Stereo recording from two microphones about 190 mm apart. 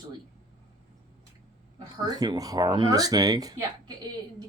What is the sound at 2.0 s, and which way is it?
Speech, 20° right (ahead or behind).